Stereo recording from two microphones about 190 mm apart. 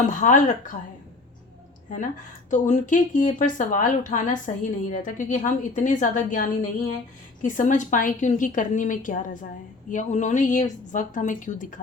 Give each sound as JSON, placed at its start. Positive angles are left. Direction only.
{"t": 0.0, "sound": "speech", "side_deg": 40}
{"t": 2.5, "sound": "speech", "side_deg": 40}